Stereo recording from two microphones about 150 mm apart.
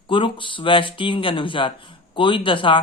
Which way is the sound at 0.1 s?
35° left (ahead or behind).